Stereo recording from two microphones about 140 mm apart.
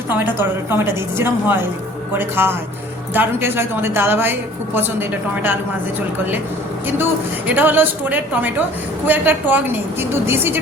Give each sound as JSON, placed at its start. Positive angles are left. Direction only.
{"t": 0.1, "sound": "a woman's voice", "side_deg": -15}
{"t": 7.0, "sound": "a woman's voice", "side_deg": -10}